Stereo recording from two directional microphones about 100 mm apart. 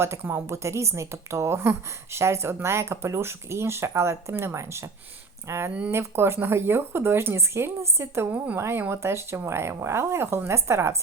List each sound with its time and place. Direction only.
0.2 s speech: 20° right (ahead or behind)